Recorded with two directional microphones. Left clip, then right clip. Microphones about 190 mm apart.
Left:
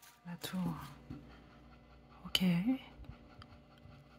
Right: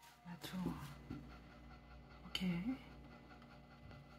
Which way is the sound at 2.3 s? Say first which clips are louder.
Left 10 dB; 45° left (ahead or behind).